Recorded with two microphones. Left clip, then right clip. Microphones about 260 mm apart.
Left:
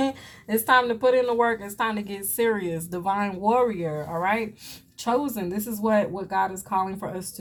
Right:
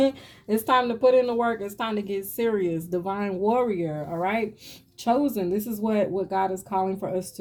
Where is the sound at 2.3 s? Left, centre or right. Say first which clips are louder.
Left 2 dB; left.